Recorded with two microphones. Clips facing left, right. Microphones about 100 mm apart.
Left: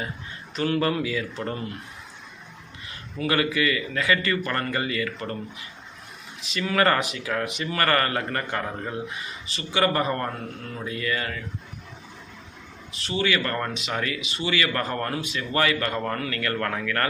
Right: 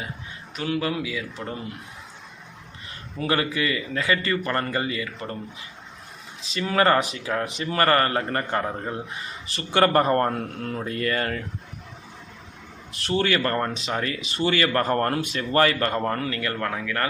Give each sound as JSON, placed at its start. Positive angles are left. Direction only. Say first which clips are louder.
{"t": 0.5, "sound": "speech", "louder": "left 2 dB", "side_deg": -5}
{"t": 3.2, "sound": "a man's voice", "louder": "left 1 dB", "side_deg": -30}
{"t": 6.5, "sound": "a man's voice", "louder": "right 2 dB", "side_deg": -30}
{"t": 9.7, "sound": "a man's voice", "louder": "right 5 dB", "side_deg": -50}
{"t": 13.1, "sound": "a man's voice", "louder": "right 2 dB", "side_deg": -40}
{"t": 15.3, "sound": "a man's voice", "louder": "right 1 dB", "side_deg": -40}